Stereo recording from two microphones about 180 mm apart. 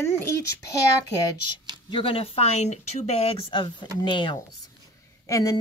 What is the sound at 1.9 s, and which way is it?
A woman's voice, 30° left (ahead or behind).